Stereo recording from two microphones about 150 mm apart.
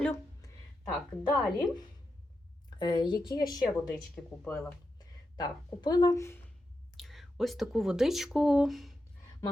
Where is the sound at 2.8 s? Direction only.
30° left (ahead or behind).